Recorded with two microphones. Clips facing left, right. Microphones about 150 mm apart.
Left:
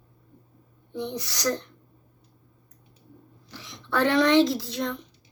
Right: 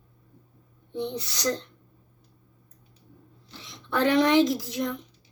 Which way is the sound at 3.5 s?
20° right (ahead or behind).